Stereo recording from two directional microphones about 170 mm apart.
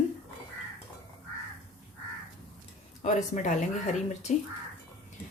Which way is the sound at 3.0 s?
45° left (ahead or behind).